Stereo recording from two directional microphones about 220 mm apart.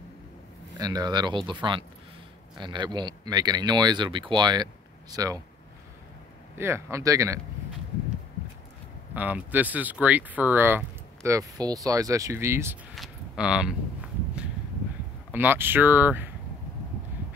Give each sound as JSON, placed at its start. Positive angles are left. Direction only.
{"t": 0.7, "sound": "speech", "side_deg": -15}
{"t": 6.6, "sound": "speech", "side_deg": -10}
{"t": 9.1, "sound": "speech", "side_deg": -10}
{"t": 12.9, "sound": "walk", "side_deg": 0}
{"t": 15.3, "sound": "speech", "side_deg": -10}